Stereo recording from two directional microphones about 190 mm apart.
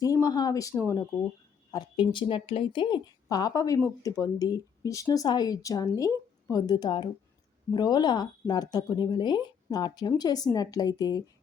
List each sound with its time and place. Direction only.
0.0 s speech: 20° left (ahead or behind)